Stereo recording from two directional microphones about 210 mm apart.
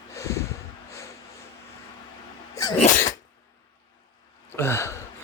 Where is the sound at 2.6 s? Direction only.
15° left (ahead or behind).